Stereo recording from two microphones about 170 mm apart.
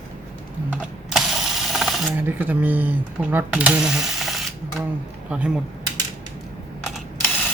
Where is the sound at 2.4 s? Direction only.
10° right (ahead or behind).